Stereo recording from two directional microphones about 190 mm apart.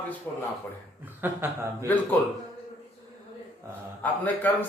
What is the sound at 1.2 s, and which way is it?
Speech, 10° right (ahead or behind).